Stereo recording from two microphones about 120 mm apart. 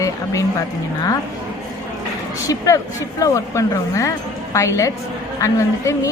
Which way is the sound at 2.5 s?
30° left (ahead or behind).